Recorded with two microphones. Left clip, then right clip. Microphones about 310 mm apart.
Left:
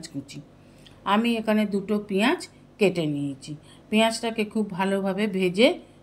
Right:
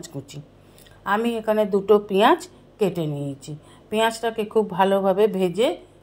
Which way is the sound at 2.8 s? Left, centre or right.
Centre.